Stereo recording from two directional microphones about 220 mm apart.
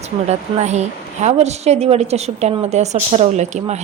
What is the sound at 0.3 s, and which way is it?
A woman's voice, 30° right (ahead or behind).